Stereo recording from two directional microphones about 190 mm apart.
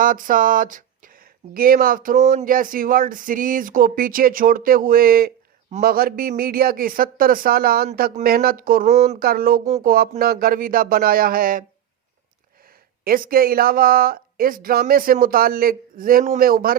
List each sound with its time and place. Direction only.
0.0 s speech: 45° right (ahead or behind)
8.9 s speech: 35° right (ahead or behind)
9.1 s speech: 50° right (ahead or behind)
13.1 s speech: 50° right (ahead or behind)